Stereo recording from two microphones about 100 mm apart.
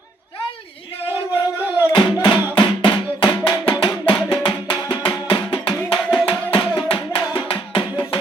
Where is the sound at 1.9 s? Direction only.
50° left (ahead or behind).